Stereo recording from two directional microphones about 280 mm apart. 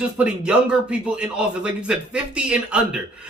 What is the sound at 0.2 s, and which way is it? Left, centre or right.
A man's voice, centre.